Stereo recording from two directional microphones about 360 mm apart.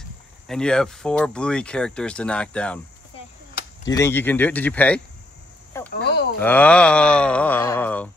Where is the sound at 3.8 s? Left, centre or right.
Centre.